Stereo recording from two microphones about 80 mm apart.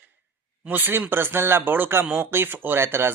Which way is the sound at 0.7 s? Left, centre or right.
Right.